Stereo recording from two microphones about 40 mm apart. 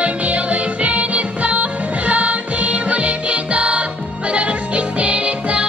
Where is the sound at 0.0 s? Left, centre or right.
Right.